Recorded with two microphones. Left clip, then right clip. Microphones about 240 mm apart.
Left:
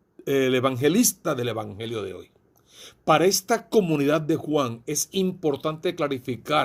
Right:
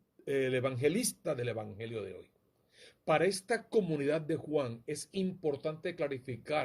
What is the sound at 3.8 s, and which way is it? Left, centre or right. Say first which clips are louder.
A man's voice: left 10 dB; left.